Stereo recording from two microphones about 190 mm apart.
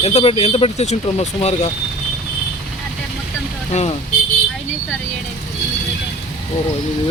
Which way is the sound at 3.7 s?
35° left (ahead or behind).